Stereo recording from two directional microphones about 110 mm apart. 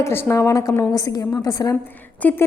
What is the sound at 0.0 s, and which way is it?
A woman's voice, 25° left (ahead or behind).